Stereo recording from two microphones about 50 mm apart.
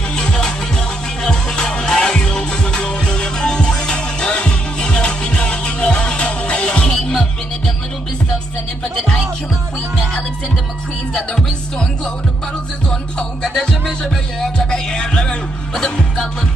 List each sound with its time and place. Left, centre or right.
0.1 s music: centre
11.1 s music: centre
13.4 s music: centre